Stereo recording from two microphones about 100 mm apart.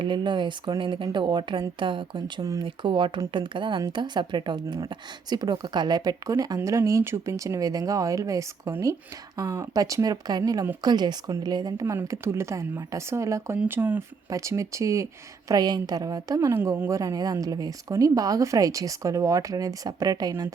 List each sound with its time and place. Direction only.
0.0 s speech: 50° right (ahead or behind)
12.0 s speech: 25° right (ahead or behind)
13.7 s speech: 20° right (ahead or behind)
14.3 s speech: 30° right (ahead or behind)
15.4 s speech: 40° right (ahead or behind)